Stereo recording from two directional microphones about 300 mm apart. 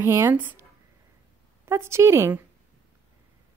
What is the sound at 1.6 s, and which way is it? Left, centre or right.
Speech, centre.